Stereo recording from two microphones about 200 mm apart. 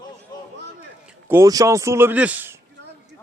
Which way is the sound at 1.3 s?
15° right (ahead or behind).